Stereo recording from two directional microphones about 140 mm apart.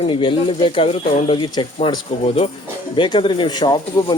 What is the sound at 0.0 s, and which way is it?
Speech, 35° left (ahead or behind).